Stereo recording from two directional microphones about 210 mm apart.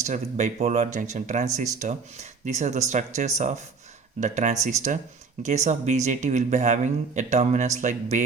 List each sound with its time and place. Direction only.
0.0 s a man's voice: 35° right (ahead or behind)